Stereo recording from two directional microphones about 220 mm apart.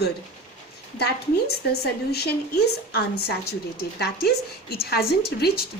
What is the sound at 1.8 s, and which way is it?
A woman's voice, 45° left (ahead or behind).